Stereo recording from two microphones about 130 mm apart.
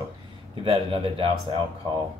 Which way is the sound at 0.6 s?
45° right (ahead or behind).